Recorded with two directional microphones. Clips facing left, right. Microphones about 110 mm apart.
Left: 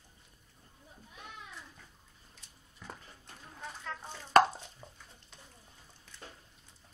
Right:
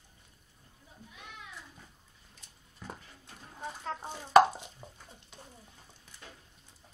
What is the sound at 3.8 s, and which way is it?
Chopping, 30° right (ahead or behind).